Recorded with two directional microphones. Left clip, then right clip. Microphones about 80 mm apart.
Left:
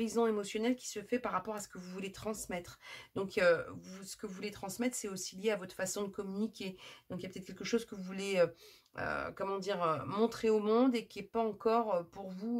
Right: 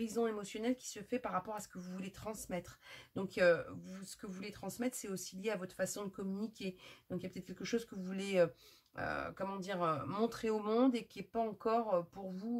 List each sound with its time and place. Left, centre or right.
0.0 s speech: left